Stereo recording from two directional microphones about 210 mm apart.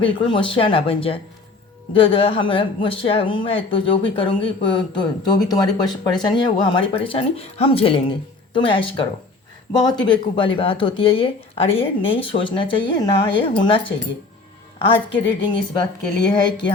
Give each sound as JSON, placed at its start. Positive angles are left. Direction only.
{"t": 0.2, "sound": "speech", "side_deg": 25}